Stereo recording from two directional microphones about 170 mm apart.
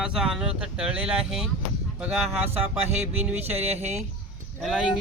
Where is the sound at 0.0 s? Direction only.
5° right (ahead or behind).